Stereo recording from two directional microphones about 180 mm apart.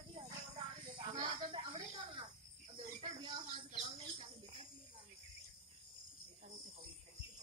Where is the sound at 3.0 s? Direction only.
25° right (ahead or behind).